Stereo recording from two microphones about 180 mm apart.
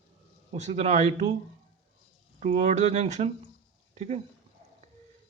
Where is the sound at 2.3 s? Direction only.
40° right (ahead or behind).